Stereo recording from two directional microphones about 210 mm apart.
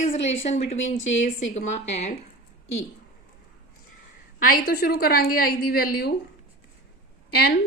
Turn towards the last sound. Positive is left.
turn(degrees=45)  # may be behind; listen again after turning